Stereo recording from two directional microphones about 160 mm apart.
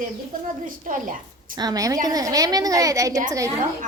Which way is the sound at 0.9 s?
55° right (ahead or behind).